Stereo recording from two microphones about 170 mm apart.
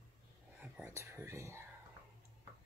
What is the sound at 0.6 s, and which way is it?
Speech, 15° right (ahead or behind).